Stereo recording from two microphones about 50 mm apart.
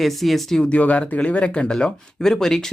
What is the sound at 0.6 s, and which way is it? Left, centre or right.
Speech, left.